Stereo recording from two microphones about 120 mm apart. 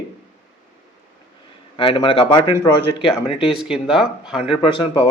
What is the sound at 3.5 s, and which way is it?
Speech, 5° right (ahead or behind).